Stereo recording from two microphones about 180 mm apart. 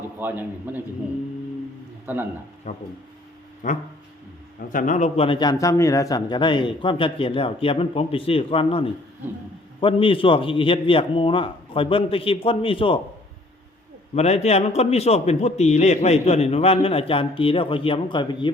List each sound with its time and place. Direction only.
0.2 s a man's voice: 10° right (ahead or behind)
2.1 s a man's voice: 10° right (ahead or behind)
2.7 s a man's voice: 40° left (ahead or behind)
14.2 s a man's voice: 35° left (ahead or behind)